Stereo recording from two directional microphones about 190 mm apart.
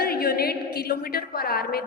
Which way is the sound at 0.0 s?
55° left (ahead or behind).